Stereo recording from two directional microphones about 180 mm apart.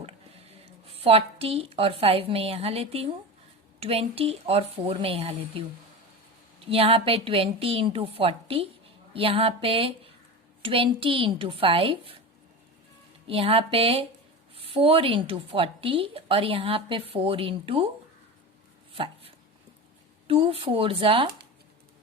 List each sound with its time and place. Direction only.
0.6 s a woman's voice: 35° right (ahead or behind)
6.7 s a woman's voice: 30° right (ahead or behind)
13.2 s a woman's voice: 30° right (ahead or behind)
18.9 s dog: 30° right (ahead or behind)
20.2 s a woman's voice: 30° right (ahead or behind)